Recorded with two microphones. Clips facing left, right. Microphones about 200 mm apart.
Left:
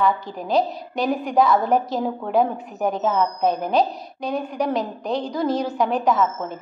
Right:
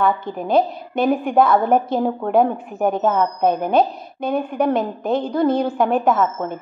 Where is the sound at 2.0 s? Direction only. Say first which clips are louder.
Right 4 dB; 55° right (ahead or behind).